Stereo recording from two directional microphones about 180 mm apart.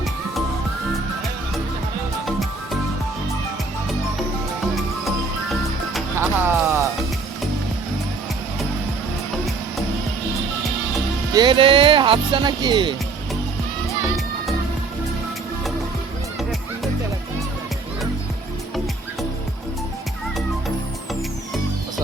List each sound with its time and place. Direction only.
6.1 s music: 10° right (ahead or behind)
11.3 s speech: 25° right (ahead or behind)
16.4 s music: centre (ahead or behind)